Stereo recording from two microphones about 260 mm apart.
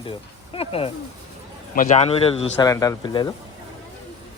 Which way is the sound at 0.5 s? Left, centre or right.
Left.